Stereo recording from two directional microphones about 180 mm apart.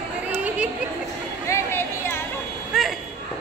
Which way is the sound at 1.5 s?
15° left (ahead or behind).